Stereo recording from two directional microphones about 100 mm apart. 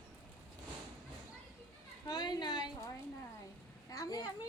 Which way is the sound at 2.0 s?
40° left (ahead or behind).